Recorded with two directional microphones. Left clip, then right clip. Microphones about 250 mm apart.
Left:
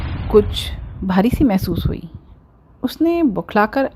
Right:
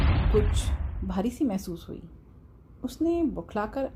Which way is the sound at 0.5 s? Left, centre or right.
Left.